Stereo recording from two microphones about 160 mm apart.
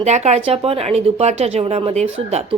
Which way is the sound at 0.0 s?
45° right (ahead or behind).